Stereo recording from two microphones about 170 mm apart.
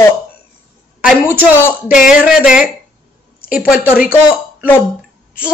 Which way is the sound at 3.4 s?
60° left (ahead or behind).